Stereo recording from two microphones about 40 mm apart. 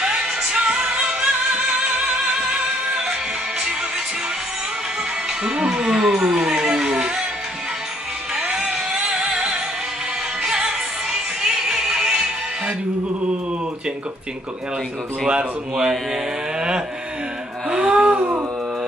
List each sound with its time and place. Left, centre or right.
0.0 s music: centre
5.4 s speech: right
6.2 s a sound: right
8.4 s music: centre
15.2 s a man's voice: right
16.5 s a sound: right
17.6 s gasp: right